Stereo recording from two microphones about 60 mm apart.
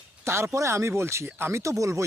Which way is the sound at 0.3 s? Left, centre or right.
Right.